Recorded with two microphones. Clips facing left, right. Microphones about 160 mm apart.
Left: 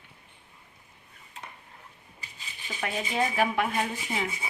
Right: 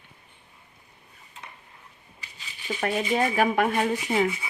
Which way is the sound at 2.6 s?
45° right (ahead or behind).